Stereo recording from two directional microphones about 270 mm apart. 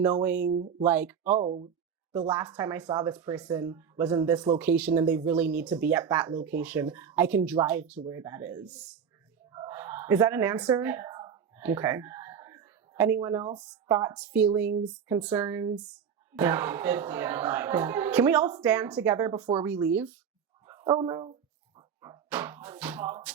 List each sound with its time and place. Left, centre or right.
0.0 s speech: centre
0.5 s speech: right
0.9 s speech: centre
1.4 s speech: right
2.1 s speech: centre
9.5 s a sound: centre
13.4 s speech: centre
21.8 s a sound: centre